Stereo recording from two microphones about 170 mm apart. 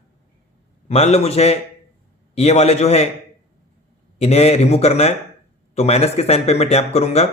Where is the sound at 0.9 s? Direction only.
40° left (ahead or behind).